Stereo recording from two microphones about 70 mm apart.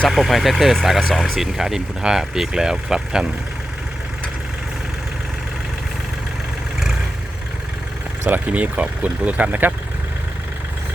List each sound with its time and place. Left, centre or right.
0.1 s speech: centre
8.3 s speech: right